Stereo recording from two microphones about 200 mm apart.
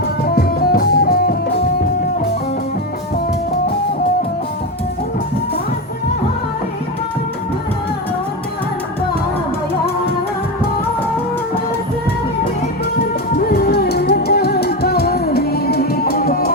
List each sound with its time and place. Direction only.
0.3 s music: 50° left (ahead or behind)
13.3 s music: 50° left (ahead or behind)